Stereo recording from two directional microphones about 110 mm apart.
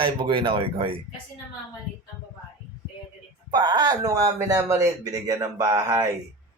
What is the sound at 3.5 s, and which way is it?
Speech, 40° right (ahead or behind).